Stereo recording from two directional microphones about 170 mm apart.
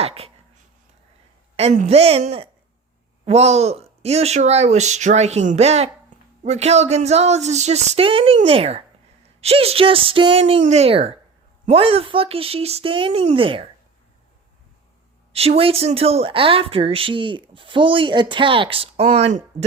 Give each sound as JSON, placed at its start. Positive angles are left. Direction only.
{"t": 0.0, "sound": "speech", "side_deg": -35}
{"t": 1.5, "sound": "speech", "side_deg": -40}
{"t": 15.3, "sound": "speech", "side_deg": -35}